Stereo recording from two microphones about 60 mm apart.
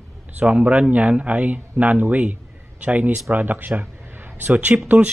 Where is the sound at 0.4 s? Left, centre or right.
Right.